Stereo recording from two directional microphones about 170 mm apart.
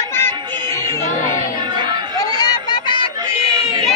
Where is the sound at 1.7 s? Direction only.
25° right (ahead or behind).